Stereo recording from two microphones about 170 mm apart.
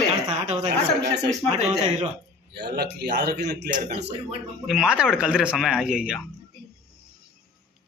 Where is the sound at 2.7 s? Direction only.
70° right (ahead or behind).